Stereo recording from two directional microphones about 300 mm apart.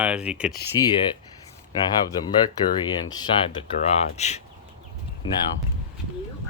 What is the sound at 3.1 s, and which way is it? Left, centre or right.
Speech, centre.